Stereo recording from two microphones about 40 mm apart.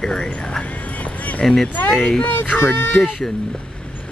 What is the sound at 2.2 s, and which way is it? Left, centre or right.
Speech, left.